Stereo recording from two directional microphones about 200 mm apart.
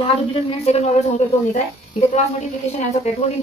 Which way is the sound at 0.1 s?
30° left (ahead or behind).